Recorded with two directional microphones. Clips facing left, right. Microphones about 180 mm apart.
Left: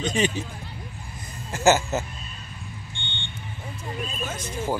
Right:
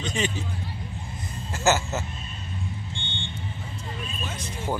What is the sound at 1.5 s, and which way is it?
Speech, 15° left (ahead or behind).